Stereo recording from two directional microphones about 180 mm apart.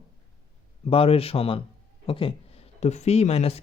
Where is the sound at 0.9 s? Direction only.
30° left (ahead or behind).